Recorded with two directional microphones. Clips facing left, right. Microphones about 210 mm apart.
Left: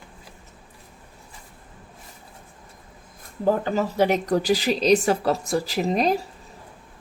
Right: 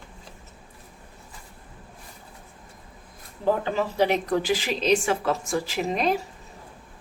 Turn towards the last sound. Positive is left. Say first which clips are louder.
# left 3 dB
turn(degrees=35)  # may be behind; listen again after turning